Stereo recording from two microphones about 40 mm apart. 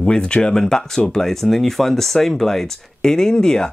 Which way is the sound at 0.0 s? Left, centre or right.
Left.